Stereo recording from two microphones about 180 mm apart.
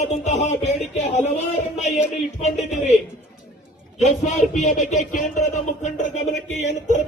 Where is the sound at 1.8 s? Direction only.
40° left (ahead or behind).